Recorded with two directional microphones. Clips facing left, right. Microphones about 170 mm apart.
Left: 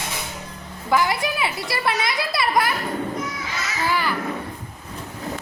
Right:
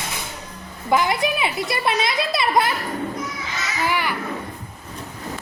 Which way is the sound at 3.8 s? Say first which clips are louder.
Even; 15° right (ahead or behind).